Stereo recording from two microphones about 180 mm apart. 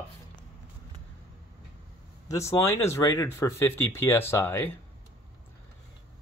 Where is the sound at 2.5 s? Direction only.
15° left (ahead or behind).